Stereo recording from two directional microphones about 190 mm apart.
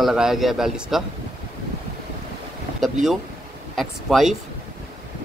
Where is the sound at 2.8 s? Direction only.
Centre (ahead or behind).